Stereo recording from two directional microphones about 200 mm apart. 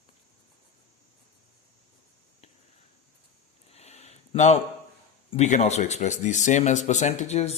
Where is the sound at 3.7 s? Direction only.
30° left (ahead or behind).